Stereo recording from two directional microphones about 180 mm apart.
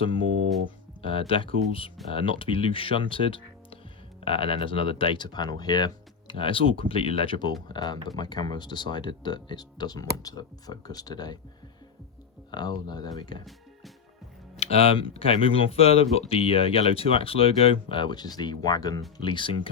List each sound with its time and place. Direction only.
1.0 s speech: 30° left (ahead or behind)
12.5 s speech: 25° left (ahead or behind)
14.5 s speech: 35° left (ahead or behind)